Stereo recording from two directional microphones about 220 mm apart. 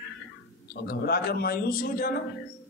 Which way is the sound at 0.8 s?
45° left (ahead or behind).